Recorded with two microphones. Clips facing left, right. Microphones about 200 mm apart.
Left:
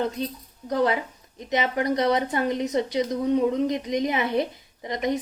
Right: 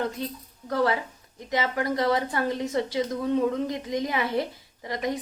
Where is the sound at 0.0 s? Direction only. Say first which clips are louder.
Left 3 dB; 20° left (ahead or behind).